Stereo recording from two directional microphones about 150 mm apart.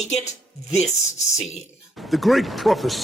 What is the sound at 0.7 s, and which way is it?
Speech, 50° left (ahead or behind).